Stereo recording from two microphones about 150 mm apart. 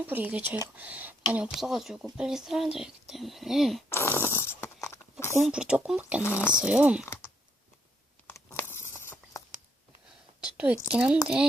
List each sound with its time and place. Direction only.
0.0 s speech: 10° right (ahead or behind)
3.8 s a sound: 15° left (ahead or behind)
5.4 s speech: 5° right (ahead or behind)
6.2 s speech: 15° left (ahead or behind)
6.6 s speech: 5° right (ahead or behind)
8.5 s a sound: 15° left (ahead or behind)
10.8 s speech: 10° right (ahead or behind)